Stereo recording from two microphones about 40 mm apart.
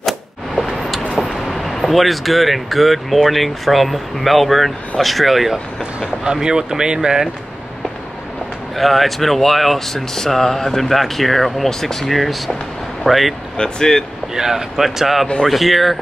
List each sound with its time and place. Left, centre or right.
1.1 s speech: centre
5.5 s speech: centre
8.7 s speech: centre
13.6 s speech: centre
14.3 s speech: centre